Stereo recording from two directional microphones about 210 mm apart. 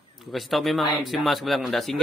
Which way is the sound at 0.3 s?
Centre (ahead or behind).